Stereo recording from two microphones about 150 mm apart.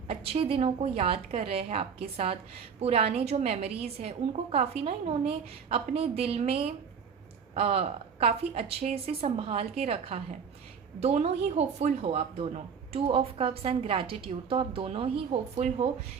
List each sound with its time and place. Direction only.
0.1 s a woman's voice: 40° right (ahead or behind)
15.5 s a woman's voice: 55° right (ahead or behind)